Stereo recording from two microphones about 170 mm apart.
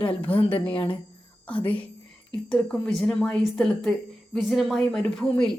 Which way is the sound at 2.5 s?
5° left (ahead or behind).